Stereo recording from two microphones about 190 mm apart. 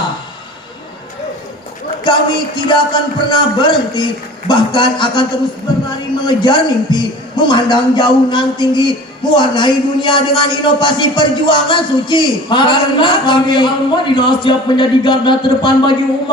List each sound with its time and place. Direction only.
2.0 s a man's voice: 25° left (ahead or behind)